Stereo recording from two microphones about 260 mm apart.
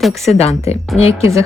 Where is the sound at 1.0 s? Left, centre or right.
Left.